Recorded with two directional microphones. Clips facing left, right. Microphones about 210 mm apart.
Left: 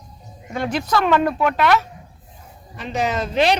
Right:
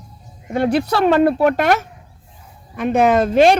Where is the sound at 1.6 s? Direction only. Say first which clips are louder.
Right 1 dB; 50° right (ahead or behind).